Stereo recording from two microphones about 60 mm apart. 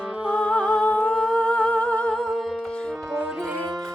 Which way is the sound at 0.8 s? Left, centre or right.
Left.